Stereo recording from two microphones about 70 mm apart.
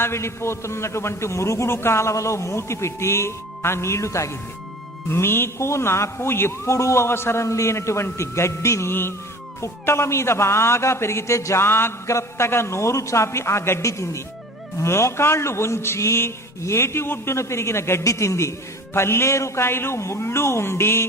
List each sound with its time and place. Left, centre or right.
0.0 s a man's voice: left
5.0 s a man's voice: left
11.6 s a man's voice: left
18.0 s a man's voice: left